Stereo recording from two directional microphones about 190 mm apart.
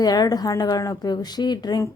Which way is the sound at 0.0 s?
20° left (ahead or behind).